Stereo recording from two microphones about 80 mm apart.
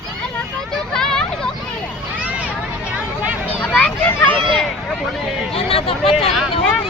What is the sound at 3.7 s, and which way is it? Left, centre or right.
Speech, left.